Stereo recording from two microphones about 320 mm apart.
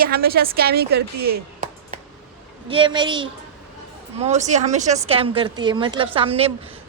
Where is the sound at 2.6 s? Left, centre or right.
Centre.